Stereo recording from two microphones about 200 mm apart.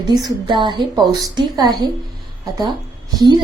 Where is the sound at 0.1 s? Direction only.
20° right (ahead or behind).